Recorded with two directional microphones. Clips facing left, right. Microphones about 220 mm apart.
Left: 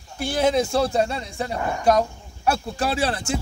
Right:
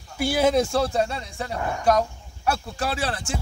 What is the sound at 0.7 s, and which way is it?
Speech, 20° left (ahead or behind).